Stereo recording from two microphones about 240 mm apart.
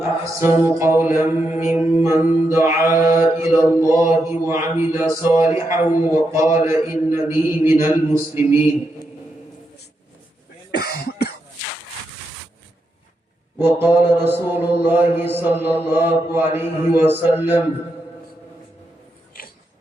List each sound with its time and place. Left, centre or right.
0.0 s speech: centre
10.7 s cough: left
13.6 s speech: centre